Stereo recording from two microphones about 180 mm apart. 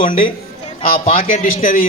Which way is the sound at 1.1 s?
50° left (ahead or behind).